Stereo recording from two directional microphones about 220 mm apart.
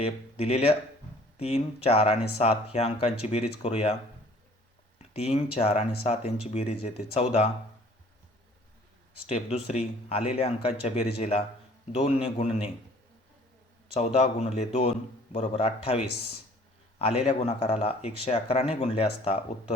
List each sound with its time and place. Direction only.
0.0 s a man's voice: 30° left (ahead or behind)
4.9 s a man's voice: 30° left (ahead or behind)
9.2 s a man's voice: 30° left (ahead or behind)
13.9 s a man's voice: 30° left (ahead or behind)
17.0 s a man's voice: 25° left (ahead or behind)